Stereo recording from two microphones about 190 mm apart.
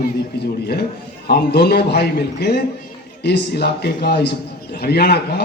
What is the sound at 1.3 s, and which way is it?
A man's voice, 55° left (ahead or behind).